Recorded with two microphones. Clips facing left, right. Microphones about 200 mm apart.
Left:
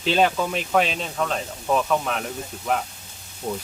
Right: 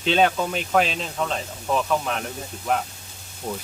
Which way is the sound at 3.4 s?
5° left (ahead or behind).